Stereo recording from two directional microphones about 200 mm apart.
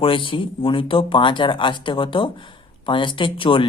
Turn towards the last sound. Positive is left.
turn(degrees=25)  # may be behind; listen again after turning